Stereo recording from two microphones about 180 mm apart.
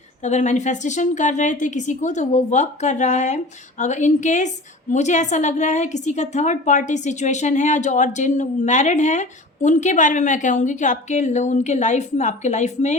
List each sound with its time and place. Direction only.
0.2 s a woman's voice: 40° left (ahead or behind)